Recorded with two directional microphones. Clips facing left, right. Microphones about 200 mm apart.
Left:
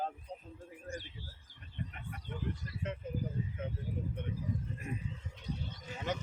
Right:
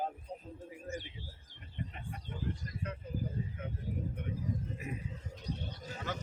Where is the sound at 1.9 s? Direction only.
25° right (ahead or behind).